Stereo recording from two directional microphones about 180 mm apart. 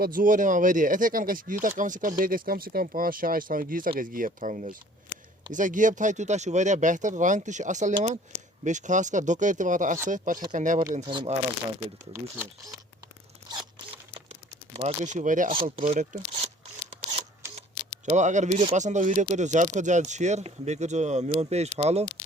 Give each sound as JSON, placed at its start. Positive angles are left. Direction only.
{"t": 0.0, "sound": "speech", "side_deg": -50}
{"t": 11.0, "sound": "speech", "side_deg": -25}
{"t": 13.9, "sound": "a sound", "side_deg": -35}
{"t": 15.7, "sound": "speech", "side_deg": -30}
{"t": 16.0, "sound": "speech", "side_deg": -45}
{"t": 17.4, "sound": "camera", "side_deg": -15}
{"t": 18.0, "sound": "speech", "side_deg": -40}